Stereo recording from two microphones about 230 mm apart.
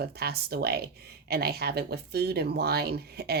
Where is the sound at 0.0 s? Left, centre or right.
Right.